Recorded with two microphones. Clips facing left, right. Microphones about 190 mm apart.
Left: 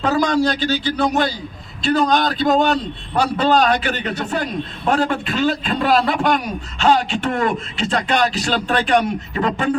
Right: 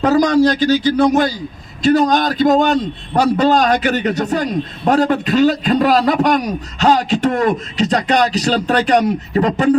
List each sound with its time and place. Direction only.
0.0 s a man's voice: 40° right (ahead or behind)